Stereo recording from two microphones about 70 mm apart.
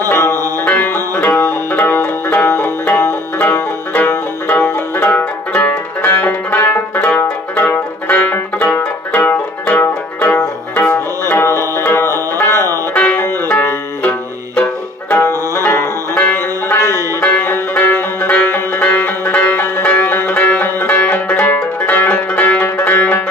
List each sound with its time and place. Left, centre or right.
0.1 s music: left
11.3 s music: left
12.9 s music: left
15.2 s music: left
15.6 s banjo: left
16.2 s music: left